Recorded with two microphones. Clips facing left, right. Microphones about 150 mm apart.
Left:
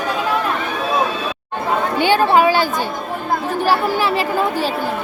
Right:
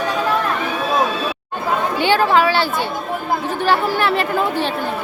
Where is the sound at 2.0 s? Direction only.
15° left (ahead or behind).